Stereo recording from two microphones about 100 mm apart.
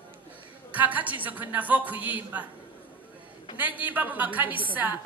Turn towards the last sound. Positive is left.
turn(degrees=-15)  # may be behind; listen again after turning